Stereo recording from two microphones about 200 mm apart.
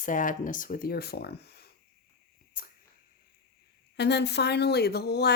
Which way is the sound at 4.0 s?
55° left (ahead or behind).